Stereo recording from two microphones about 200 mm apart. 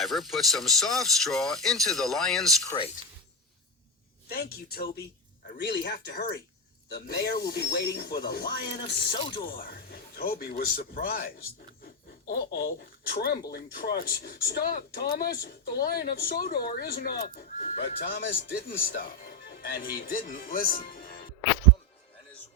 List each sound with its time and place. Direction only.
0.0 s speech: centre (ahead or behind)
2.6 s speech: 25° left (ahead or behind)
4.3 s speech: 50° left (ahead or behind)
8.7 s speech: 25° left (ahead or behind)
9.5 s speech: 50° left (ahead or behind)
12.3 s speech: 50° left (ahead or behind)